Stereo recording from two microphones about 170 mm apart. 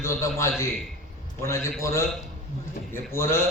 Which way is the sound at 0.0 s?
15° left (ahead or behind).